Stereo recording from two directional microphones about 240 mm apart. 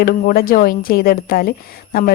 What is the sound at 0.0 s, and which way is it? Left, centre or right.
A woman's voice, left.